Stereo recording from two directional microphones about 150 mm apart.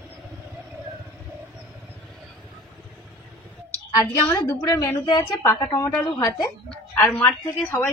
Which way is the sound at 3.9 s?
20° left (ahead or behind).